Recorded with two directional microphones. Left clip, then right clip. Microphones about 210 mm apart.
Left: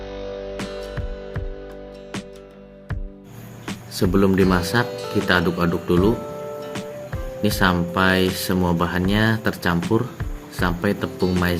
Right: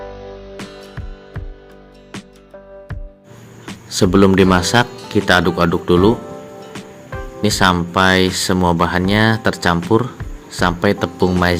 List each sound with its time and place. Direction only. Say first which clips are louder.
0.5 s music: left 3 dB; centre (ahead or behind)
3.9 s speech: right 7 dB; 35° right (ahead or behind)
4.9 s speech: right 4 dB; centre (ahead or behind)
5.2 s speech: right 6 dB; 35° right (ahead or behind)
6.6 s music: left 2 dB; centre (ahead or behind)
7.4 s speech: right 5 dB; 30° right (ahead or behind)
11.2 s speech: right 6 dB; centre (ahead or behind)